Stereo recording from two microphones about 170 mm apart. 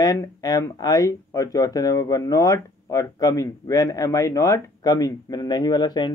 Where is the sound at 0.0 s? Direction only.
20° left (ahead or behind).